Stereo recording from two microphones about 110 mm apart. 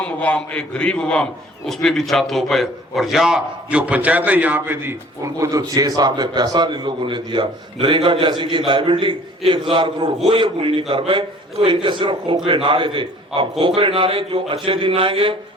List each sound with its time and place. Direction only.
0.0 s a man's voice: 10° left (ahead or behind); by 15.4 s 55° right (ahead or behind)